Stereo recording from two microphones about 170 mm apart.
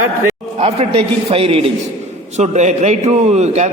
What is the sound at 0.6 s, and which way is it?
A man's voice, 40° right (ahead or behind).